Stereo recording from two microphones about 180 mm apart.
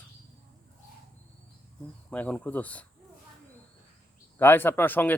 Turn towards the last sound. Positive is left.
turn(degrees=10)  # may be behind; listen again after turning